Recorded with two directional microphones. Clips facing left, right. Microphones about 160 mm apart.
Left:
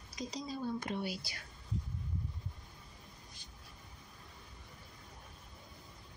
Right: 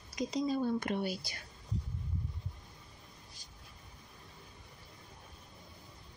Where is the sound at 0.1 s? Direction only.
60° right (ahead or behind).